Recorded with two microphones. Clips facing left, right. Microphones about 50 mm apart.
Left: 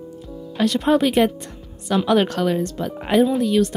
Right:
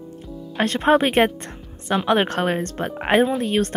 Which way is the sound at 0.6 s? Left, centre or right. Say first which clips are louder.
Even; right.